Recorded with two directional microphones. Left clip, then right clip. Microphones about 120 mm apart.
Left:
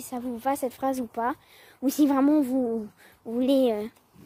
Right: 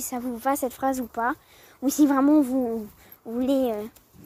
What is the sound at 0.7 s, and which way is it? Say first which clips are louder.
Speech: right 2 dB; centre (ahead or behind).